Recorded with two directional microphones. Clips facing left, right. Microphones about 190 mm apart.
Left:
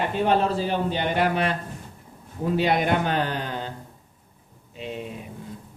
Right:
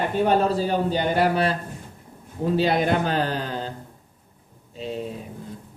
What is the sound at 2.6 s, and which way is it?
Speech, 35° right (ahead or behind).